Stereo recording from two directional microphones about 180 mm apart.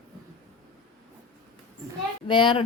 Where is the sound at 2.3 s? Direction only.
30° left (ahead or behind).